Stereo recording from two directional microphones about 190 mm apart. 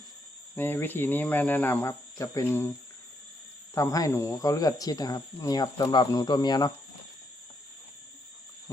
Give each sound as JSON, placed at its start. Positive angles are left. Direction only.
{"t": 0.5, "sound": "speech", "side_deg": 10}
{"t": 3.8, "sound": "speech", "side_deg": 15}